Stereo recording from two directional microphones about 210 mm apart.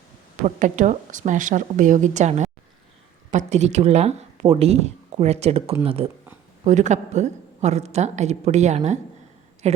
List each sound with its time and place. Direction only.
0.4 s speech: 35° right (ahead or behind)